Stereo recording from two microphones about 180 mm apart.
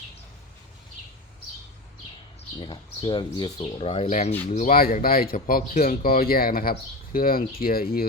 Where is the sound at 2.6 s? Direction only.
25° left (ahead or behind).